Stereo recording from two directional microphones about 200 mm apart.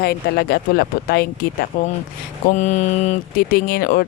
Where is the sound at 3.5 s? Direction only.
50° left (ahead or behind).